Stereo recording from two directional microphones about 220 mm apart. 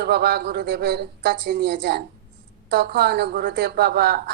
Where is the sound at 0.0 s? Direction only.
50° right (ahead or behind).